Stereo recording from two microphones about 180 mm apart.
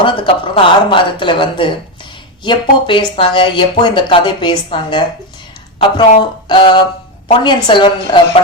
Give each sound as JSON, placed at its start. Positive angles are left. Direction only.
{"t": 0.0, "sound": "speech", "side_deg": 25}